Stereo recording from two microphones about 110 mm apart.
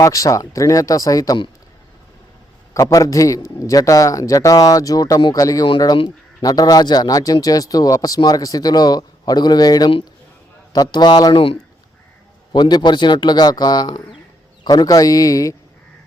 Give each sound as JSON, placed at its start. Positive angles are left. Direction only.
{"t": 0.0, "sound": "a man's voice", "side_deg": 30}
{"t": 2.7, "sound": "a man's voice", "side_deg": 30}
{"t": 5.6, "sound": "a man's voice", "side_deg": 45}
{"t": 12.5, "sound": "a man's voice", "side_deg": 40}